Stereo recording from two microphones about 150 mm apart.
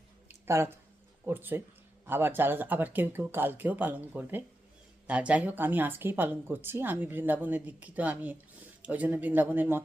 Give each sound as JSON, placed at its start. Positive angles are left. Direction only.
{"t": 0.4, "sound": "speech", "side_deg": -20}